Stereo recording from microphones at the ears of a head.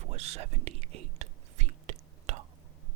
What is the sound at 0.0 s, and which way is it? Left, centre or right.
Whispering, right.